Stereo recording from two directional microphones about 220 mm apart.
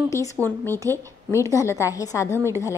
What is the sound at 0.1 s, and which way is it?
A woman's voice, 15° left (ahead or behind).